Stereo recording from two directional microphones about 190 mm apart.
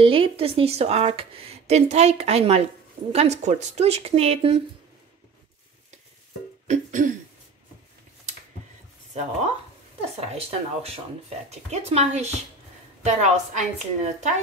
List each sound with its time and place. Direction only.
0.0 s speech: 30° right (ahead or behind)
6.7 s speech: 40° right (ahead or behind)
10.3 s speech: 30° right (ahead or behind)